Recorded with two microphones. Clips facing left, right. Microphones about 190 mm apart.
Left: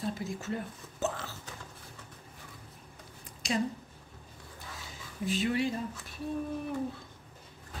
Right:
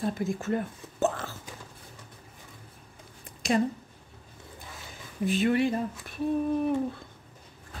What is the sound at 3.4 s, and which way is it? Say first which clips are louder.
Speech: right 6 dB; 55° right (ahead or behind).